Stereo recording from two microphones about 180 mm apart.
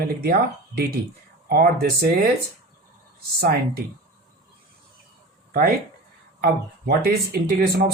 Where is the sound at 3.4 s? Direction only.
60° right (ahead or behind).